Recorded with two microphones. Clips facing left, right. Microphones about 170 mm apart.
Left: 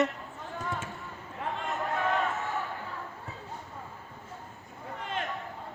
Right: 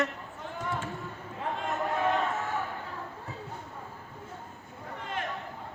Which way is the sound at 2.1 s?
Centre (ahead or behind).